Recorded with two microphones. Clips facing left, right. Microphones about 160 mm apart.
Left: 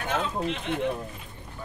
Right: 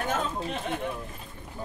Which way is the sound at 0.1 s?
45° right (ahead or behind).